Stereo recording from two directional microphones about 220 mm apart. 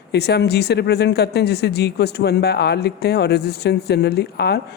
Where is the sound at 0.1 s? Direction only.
50° left (ahead or behind).